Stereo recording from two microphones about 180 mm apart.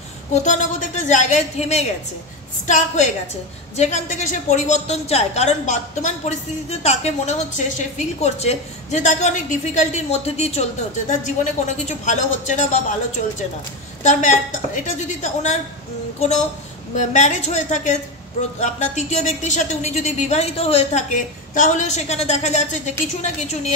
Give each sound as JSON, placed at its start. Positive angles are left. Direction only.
{"t": 0.3, "sound": "a woman's voice", "side_deg": 40}
{"t": 14.0, "sound": "a woman's voice", "side_deg": 45}